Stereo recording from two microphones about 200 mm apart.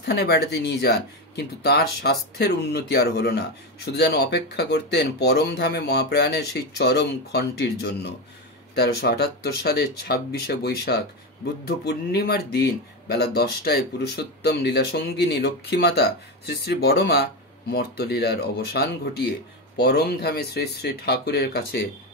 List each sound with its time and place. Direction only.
0.0 s speech: 55° left (ahead or behind)